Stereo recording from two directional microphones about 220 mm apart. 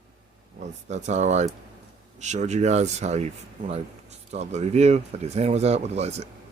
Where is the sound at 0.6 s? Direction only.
30° right (ahead or behind).